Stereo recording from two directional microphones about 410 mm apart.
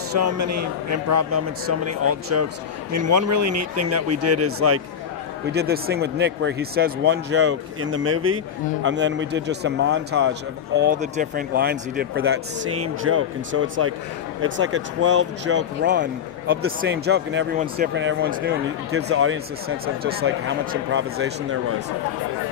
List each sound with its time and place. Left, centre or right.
0.2 s a man's voice: right